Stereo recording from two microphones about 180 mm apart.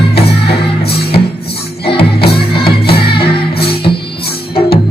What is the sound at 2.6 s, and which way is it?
Music, 60° left (ahead or behind).